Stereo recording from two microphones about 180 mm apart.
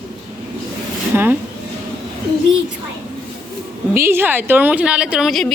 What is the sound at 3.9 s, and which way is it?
Speech, 15° right (ahead or behind).